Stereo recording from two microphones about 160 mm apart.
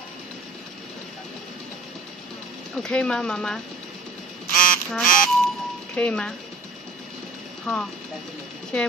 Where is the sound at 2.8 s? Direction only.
5° left (ahead or behind).